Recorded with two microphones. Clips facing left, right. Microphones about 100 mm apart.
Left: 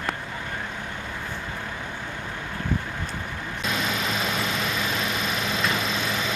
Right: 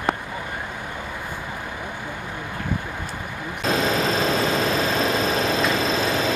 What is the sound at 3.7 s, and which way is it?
Vehicle, 35° right (ahead or behind).